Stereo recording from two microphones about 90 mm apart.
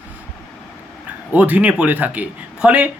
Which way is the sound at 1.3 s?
15° right (ahead or behind).